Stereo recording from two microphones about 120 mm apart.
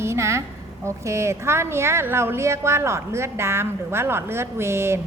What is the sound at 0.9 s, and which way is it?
A woman's voice, 25° right (ahead or behind).